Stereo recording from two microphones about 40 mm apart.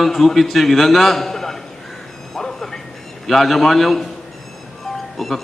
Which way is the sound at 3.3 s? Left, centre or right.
Centre.